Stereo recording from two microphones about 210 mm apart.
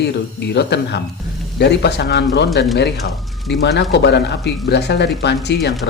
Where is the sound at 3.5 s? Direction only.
55° left (ahead or behind).